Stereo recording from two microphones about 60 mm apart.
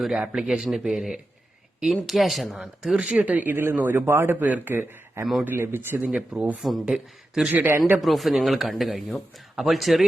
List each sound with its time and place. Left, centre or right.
0.2 s speech: centre
2.9 s speech: centre
3.5 s speech: right
5.2 s speech: centre
5.5 s speech: right
6.1 s a man's voice: centre
7.5 s speech: right
8.0 s speech: centre